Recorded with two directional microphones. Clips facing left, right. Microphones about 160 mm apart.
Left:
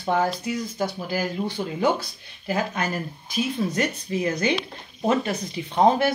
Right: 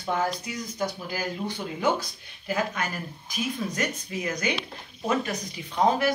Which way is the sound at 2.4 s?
35° left (ahead or behind).